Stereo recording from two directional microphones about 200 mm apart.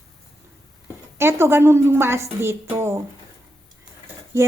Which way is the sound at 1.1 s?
10° right (ahead or behind).